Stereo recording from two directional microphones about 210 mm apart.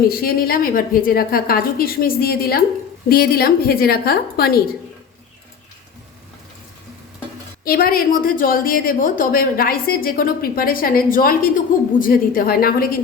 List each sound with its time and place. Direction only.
0.1 s a woman's voice: 45° left (ahead or behind)
7.6 s a woman's voice: 45° left (ahead or behind)